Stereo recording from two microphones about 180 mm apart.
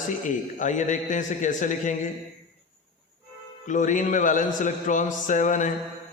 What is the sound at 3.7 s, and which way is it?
A man's voice, 45° left (ahead or behind).